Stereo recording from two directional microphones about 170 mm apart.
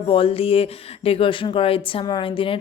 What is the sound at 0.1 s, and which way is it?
A woman's voice, 35° left (ahead or behind).